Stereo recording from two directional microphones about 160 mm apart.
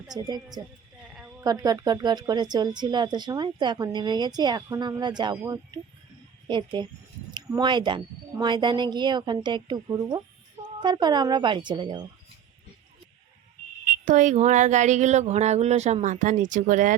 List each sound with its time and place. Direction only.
0.1 s a woman's voice: 25° right (ahead or behind)
6.5 s a woman's voice: 30° right (ahead or behind)
14.1 s speech: 50° right (ahead or behind)